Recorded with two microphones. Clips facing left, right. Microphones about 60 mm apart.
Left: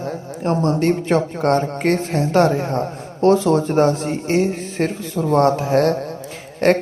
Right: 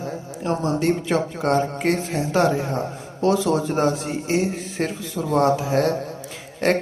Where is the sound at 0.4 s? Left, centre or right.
Left.